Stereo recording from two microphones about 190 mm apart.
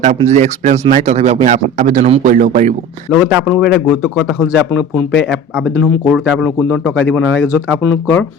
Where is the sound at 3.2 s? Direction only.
10° right (ahead or behind).